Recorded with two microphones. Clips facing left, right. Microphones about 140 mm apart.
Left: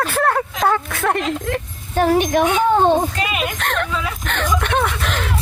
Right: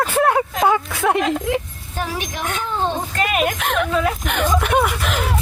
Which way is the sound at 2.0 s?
55° left (ahead or behind).